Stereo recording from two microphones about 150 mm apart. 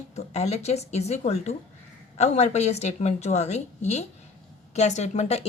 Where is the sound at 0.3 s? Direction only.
45° left (ahead or behind).